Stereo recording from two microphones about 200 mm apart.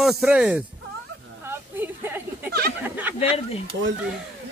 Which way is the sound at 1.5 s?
10° right (ahead or behind).